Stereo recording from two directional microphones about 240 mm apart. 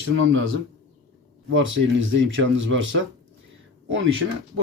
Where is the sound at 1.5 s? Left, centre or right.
Right.